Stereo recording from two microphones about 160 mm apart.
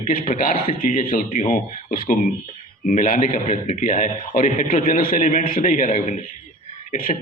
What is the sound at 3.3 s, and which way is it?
Speech, 45° left (ahead or behind).